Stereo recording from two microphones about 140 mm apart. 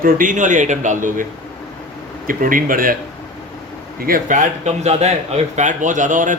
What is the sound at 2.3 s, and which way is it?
Speech, 80° right.